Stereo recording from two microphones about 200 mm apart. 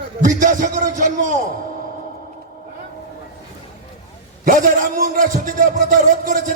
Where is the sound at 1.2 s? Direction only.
40° right (ahead or behind).